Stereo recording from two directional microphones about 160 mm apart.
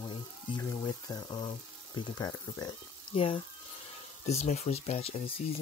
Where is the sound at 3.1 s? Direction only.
35° left (ahead or behind).